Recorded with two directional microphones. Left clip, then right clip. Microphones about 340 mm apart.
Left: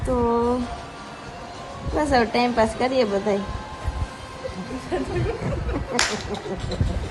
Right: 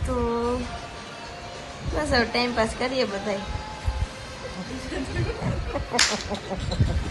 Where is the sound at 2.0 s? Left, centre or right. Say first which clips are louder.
Left 3 dB; centre.